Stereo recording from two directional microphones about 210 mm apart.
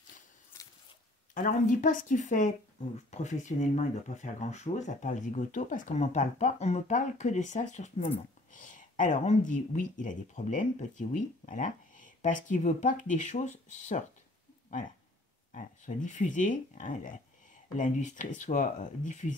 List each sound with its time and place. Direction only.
1.3 s speech: 40° left (ahead or behind)
15.5 s speech: 35° left (ahead or behind)